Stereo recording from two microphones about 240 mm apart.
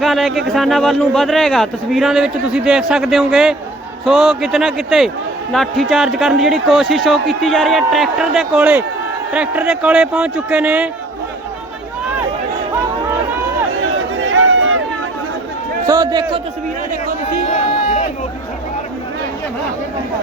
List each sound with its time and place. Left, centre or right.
0.0 s a man's voice: centre
14.2 s run: right
15.9 s a man's voice: centre
17.5 s a sound: left